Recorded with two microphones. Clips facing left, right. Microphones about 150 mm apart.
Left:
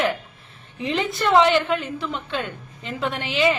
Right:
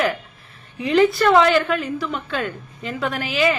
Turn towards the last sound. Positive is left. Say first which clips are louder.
# right 1 dB
turn(degrees=25)  # may be behind; listen again after turning